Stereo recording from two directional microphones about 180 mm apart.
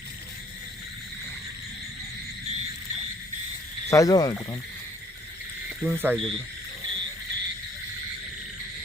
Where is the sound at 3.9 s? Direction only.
20° left (ahead or behind).